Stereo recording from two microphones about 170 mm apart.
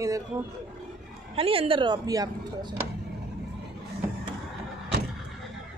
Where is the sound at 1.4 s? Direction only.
35° right (ahead or behind).